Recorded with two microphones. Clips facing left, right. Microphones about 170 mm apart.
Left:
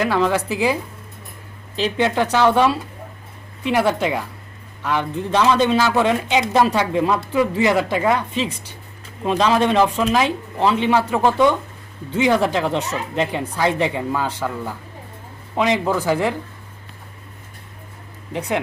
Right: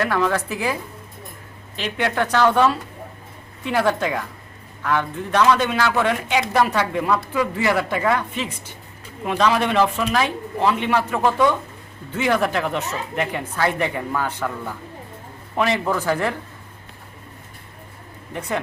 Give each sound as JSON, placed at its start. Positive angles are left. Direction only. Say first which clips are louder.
{"t": 0.0, "sound": "speech", "louder": "left 2 dB", "side_deg": 25}
{"t": 14.3, "sound": "speech", "louder": "left 2 dB", "side_deg": 5}
{"t": 15.5, "sound": "speech", "louder": "left 2 dB", "side_deg": 20}